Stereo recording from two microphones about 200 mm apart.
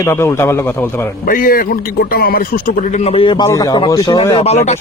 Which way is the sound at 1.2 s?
45° left (ahead or behind).